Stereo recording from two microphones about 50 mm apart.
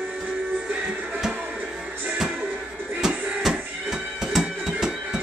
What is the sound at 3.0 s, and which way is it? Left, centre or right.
Music, centre.